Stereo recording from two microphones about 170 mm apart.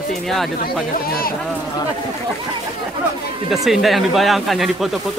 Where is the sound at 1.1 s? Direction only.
60° left (ahead or behind).